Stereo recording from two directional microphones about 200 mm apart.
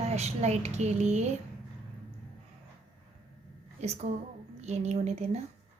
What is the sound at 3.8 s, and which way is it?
Speech, 35° right (ahead or behind).